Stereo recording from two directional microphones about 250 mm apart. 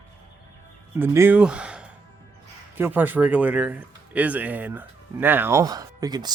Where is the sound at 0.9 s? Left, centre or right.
Centre.